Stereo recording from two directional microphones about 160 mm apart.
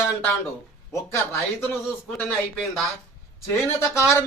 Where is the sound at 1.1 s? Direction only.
15° left (ahead or behind).